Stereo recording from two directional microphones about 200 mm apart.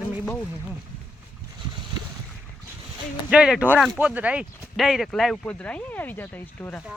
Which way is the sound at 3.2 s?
5° right (ahead or behind).